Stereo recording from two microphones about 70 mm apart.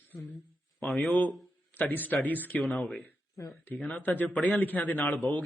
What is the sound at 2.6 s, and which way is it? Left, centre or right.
Speech, centre.